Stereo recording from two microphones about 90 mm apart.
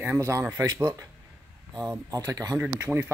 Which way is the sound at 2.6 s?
15° right (ahead or behind).